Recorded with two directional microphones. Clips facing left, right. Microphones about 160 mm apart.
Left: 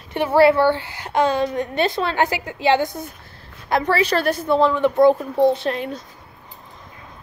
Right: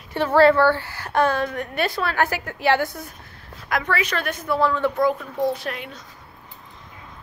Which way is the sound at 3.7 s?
30° left (ahead or behind).